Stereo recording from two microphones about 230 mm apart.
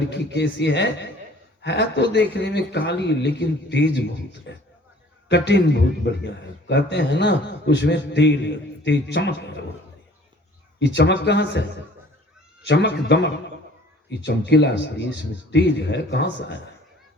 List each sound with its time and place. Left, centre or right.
0.1 s a man's voice: left
10.8 s a man's voice: left
12.6 s a man's voice: left